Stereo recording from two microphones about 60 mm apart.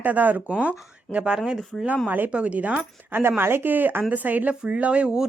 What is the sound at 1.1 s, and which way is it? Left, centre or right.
Speech, right.